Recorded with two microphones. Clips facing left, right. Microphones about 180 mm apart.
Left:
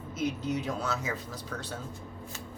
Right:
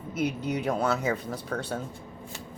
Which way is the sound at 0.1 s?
65° right (ahead or behind).